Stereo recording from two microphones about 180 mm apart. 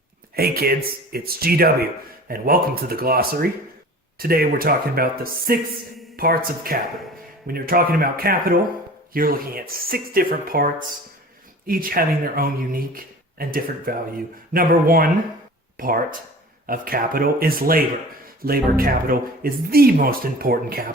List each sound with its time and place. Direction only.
0.3 s speech: 55° right (ahead or behind)